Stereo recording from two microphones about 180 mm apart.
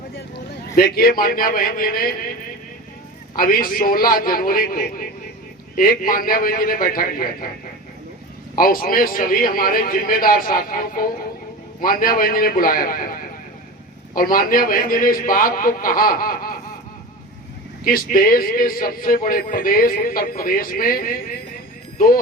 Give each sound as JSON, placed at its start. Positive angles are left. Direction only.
{"t": 0.8, "sound": "a man's voice", "side_deg": 55}
{"t": 3.3, "sound": "a man's voice", "side_deg": 55}
{"t": 8.5, "sound": "a man's voice", "side_deg": 55}
{"t": 14.2, "sound": "a man's voice", "side_deg": 50}
{"t": 17.8, "sound": "a man's voice", "side_deg": 55}